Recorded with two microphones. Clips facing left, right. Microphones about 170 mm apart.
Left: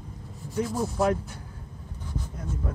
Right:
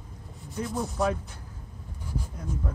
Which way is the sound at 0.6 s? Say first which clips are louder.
Left 1 dB; centre (ahead or behind).